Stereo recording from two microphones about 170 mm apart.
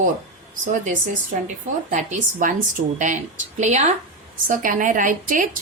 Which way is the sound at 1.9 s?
45° right (ahead or behind).